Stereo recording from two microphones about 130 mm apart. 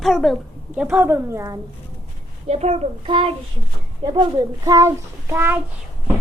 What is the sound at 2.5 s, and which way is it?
Speech, 55° right (ahead or behind).